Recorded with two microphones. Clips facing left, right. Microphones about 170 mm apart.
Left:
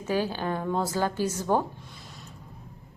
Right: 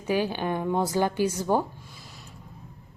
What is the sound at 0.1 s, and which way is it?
A woman's voice, 15° right (ahead or behind).